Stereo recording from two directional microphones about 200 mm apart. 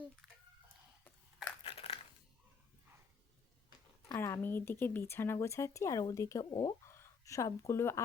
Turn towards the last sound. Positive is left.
turn(degrees=15)  # may be behind; listen again after turning